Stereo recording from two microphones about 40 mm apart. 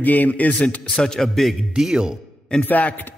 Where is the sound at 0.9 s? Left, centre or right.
Centre.